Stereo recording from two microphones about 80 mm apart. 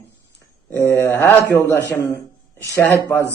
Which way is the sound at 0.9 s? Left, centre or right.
Left.